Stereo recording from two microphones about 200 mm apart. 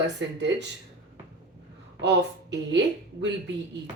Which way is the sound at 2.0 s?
60° right (ahead or behind).